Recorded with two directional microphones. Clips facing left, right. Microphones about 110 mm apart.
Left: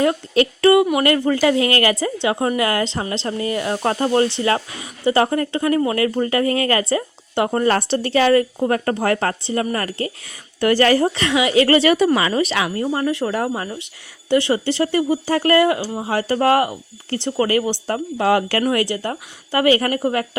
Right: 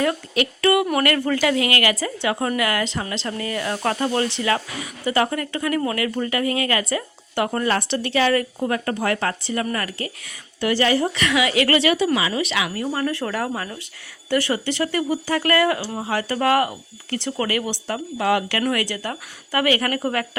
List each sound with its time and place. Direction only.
0.0 s speech: 30° left (ahead or behind)
10.6 s speech: 45° left (ahead or behind)
12.3 s speech: 40° left (ahead or behind)
15.8 s speech: 10° left (ahead or behind)
16.0 s speech: 30° left (ahead or behind)